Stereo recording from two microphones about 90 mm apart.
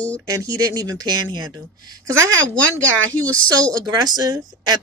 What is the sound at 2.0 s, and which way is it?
Speech, 30° right (ahead or behind).